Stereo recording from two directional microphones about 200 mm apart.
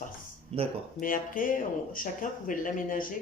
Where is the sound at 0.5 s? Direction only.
30° right (ahead or behind).